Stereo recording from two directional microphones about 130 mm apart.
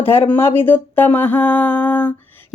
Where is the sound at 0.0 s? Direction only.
15° left (ahead or behind).